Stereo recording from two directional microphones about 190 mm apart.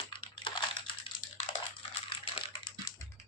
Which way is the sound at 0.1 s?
25° left (ahead or behind).